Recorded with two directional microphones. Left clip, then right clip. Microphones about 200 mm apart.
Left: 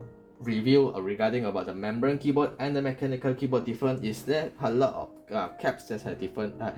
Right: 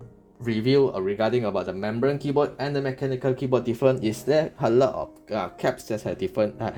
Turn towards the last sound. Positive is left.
turn(degrees=-50)  # may be behind; listen again after turning